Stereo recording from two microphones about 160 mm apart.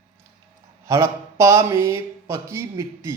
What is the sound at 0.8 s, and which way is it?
Speech, 20° right (ahead or behind).